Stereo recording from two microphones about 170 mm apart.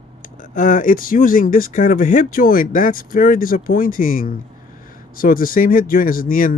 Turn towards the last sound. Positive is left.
turn(degrees=55)  # may be behind; listen again after turning